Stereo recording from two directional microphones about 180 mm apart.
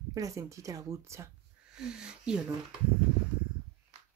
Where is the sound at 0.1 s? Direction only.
20° right (ahead or behind).